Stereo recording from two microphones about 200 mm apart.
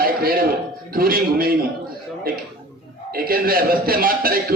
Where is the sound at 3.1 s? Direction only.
45° right (ahead or behind).